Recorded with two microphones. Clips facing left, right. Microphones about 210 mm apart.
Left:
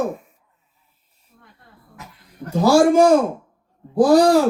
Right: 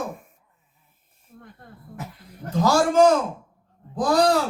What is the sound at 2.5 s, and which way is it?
Speech, 10° left (ahead or behind).